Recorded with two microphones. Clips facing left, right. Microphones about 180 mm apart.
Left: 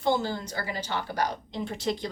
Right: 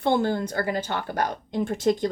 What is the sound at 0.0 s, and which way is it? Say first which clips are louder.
Speech: right 4 dB; 55° right (ahead or behind).